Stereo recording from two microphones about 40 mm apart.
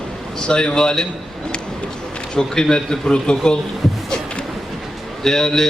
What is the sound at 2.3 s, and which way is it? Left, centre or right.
Speech, centre.